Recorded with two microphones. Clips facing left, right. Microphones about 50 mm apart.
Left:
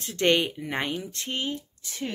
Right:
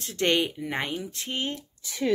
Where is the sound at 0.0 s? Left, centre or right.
Centre.